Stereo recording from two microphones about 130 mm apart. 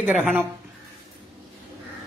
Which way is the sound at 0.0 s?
10° right (ahead or behind).